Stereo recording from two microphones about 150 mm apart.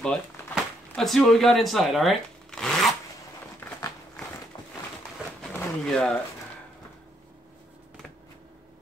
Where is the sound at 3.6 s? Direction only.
20° left (ahead or behind).